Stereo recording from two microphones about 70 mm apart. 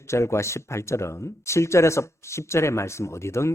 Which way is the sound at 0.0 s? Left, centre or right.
Left.